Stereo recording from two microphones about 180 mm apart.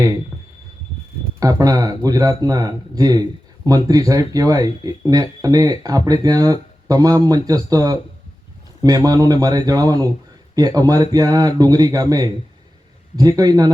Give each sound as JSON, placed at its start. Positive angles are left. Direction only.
{"t": 1.4, "sound": "speech", "side_deg": -20}